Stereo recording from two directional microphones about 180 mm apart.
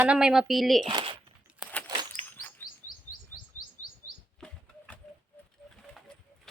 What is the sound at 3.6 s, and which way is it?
Bird, 50° left (ahead or behind).